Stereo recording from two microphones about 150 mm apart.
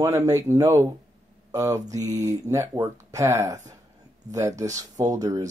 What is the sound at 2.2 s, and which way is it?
Speech, 20° right (ahead or behind).